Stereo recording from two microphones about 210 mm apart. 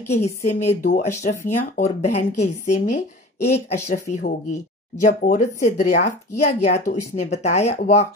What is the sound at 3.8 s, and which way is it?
A woman's voice, 35° left (ahead or behind).